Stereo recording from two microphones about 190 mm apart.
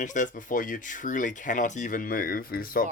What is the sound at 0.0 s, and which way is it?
Speech, 40° left (ahead or behind).